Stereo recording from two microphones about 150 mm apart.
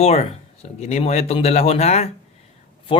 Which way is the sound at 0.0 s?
45° left (ahead or behind).